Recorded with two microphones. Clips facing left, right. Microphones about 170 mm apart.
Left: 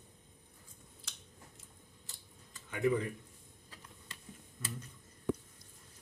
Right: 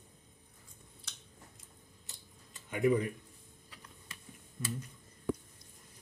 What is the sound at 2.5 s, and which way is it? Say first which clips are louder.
Speech: right 3 dB; 15° right (ahead or behind).